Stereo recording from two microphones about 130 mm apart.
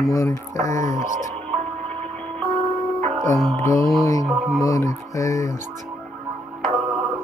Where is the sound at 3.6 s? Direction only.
25° left (ahead or behind).